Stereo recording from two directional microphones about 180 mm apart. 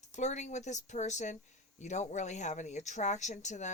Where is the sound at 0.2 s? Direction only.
40° left (ahead or behind).